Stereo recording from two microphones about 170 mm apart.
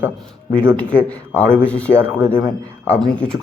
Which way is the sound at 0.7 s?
10° left (ahead or behind).